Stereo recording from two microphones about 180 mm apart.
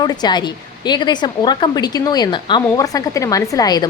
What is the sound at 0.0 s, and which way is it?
A woman's voice, 25° left (ahead or behind).